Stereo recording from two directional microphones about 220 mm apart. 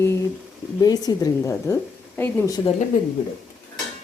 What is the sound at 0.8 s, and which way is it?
Speech, 15° left (ahead or behind).